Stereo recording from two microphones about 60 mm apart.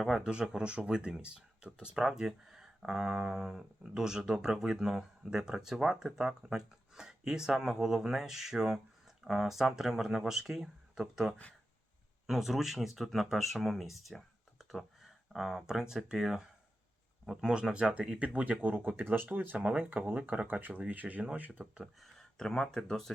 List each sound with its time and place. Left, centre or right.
0.0 s speech: centre; by 21.5 s right
22.0 s speech: centre